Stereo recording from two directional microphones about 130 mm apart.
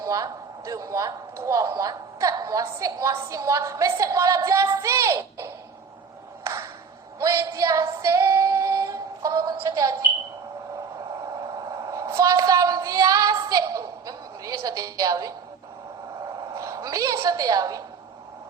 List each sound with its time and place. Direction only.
0.0 s speech: 25° right (ahead or behind)
6.4 s a sound: 20° right (ahead or behind)
7.2 s female singing: 25° right (ahead or behind)
11.2 s a woman's voice: 30° right (ahead or behind)